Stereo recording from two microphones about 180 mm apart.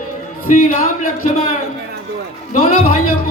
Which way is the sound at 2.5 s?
50° left (ahead or behind).